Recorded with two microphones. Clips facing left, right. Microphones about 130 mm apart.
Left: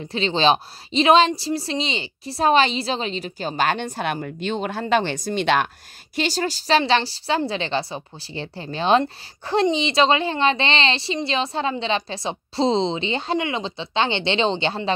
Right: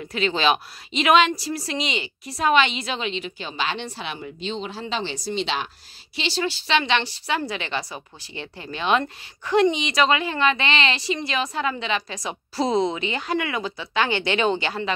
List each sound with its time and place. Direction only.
0.1 s a woman's voice: 30° left (ahead or behind); by 5.7 s 55° left (ahead or behind)
6.1 s speech: 45° left (ahead or behind); by 14.9 s 25° left (ahead or behind)